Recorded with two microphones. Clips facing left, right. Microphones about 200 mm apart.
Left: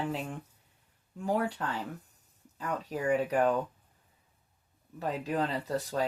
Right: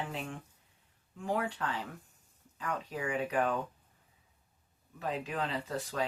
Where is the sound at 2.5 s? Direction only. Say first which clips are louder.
Left 3 dB; 40° left (ahead or behind).